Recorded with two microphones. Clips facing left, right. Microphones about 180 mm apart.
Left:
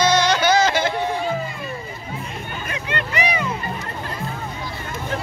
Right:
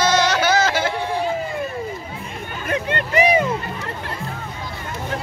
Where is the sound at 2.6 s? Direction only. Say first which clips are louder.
Right 6 dB; 50° right (ahead or behind).